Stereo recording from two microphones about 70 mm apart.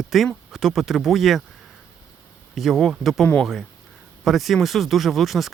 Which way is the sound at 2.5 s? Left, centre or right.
Centre.